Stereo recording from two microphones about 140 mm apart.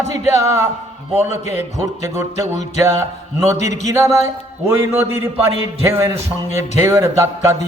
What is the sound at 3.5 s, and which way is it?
Speech, 55° left (ahead or behind).